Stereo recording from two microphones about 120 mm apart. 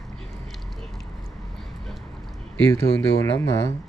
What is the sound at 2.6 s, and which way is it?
Speech, 20° left (ahead or behind).